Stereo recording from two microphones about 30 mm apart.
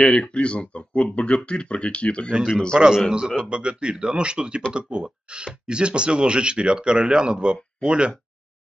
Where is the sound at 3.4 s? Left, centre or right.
Right.